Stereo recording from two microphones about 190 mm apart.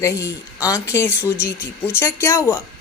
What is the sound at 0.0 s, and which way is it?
A woman's voice, 15° left (ahead or behind).